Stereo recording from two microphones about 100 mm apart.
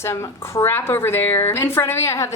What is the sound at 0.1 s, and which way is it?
A woman's voice, 25° left (ahead or behind).